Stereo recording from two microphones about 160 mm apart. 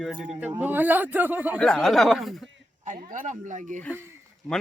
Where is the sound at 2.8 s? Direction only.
50° right (ahead or behind).